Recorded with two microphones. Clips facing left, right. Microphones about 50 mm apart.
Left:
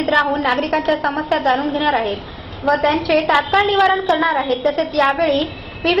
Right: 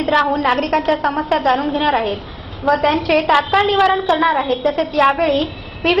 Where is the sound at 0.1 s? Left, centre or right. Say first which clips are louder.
Right 1 dB; centre.